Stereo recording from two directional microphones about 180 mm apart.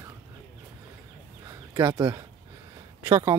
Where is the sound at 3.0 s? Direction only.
20° right (ahead or behind).